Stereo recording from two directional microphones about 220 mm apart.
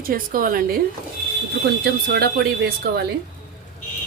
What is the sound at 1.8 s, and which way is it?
Speech, 45° right (ahead or behind).